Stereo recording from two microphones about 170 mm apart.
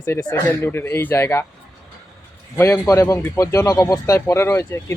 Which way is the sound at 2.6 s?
15° left (ahead or behind).